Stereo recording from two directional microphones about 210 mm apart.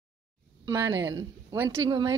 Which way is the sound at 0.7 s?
20° right (ahead or behind).